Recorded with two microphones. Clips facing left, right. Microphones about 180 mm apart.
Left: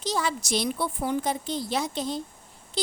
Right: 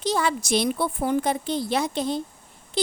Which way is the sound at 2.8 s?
60° right (ahead or behind).